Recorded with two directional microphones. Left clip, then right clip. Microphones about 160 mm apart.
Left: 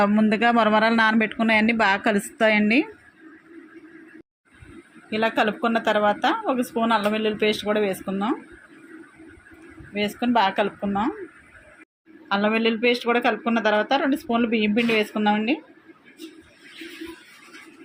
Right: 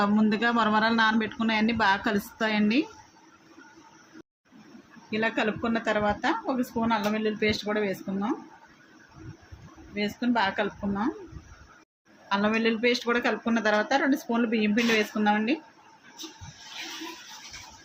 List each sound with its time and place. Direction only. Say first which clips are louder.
0.0 s speech: left 5 dB; 25° left (ahead or behind)
5.1 s speech: left 5 dB; 30° left (ahead or behind)
9.9 s speech: left 6 dB; 30° left (ahead or behind)
12.3 s speech: left 4 dB; 20° left (ahead or behind)